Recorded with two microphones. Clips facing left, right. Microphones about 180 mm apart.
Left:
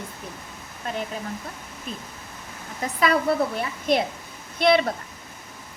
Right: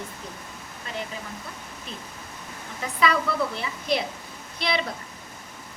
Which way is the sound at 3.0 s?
50° left (ahead or behind).